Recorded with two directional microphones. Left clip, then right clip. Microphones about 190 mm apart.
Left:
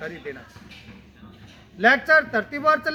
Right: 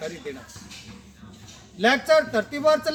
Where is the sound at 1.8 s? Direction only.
25° left (ahead or behind).